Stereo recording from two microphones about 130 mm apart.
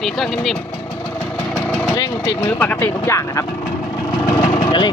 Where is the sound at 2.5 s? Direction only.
15° left (ahead or behind).